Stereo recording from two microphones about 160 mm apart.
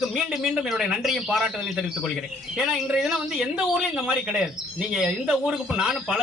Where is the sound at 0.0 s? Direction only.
5° right (ahead or behind).